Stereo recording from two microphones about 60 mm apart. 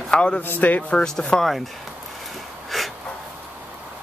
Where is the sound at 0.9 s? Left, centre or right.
Centre.